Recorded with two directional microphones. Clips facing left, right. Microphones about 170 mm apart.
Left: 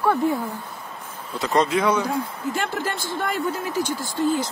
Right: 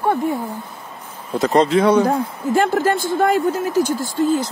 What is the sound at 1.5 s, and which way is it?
Speech, 30° right (ahead or behind).